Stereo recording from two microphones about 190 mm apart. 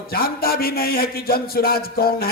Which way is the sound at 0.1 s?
50° left (ahead or behind).